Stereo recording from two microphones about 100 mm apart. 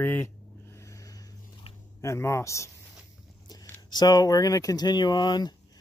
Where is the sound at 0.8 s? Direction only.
35° left (ahead or behind).